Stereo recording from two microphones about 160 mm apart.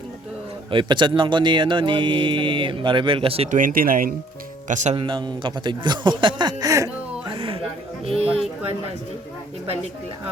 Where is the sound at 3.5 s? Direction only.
60° right (ahead or behind).